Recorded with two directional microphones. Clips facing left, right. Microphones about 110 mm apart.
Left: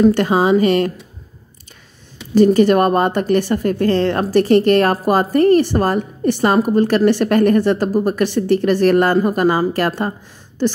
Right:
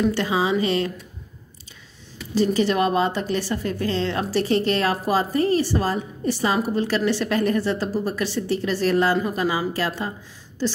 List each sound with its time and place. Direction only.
0.0 s a woman's voice: 50° left (ahead or behind)
2.3 s a woman's voice: 50° left (ahead or behind)